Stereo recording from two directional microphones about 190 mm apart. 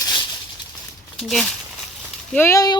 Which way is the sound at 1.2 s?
Centre (ahead or behind).